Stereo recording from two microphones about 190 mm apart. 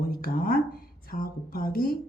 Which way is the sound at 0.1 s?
50° left (ahead or behind).